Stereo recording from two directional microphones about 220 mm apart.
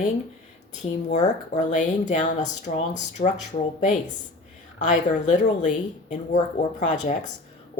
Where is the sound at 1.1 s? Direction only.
35° left (ahead or behind).